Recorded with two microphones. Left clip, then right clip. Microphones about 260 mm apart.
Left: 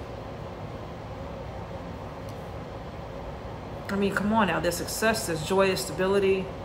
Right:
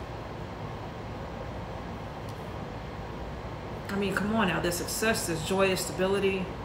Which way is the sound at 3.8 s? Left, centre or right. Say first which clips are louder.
Left 3 dB; centre.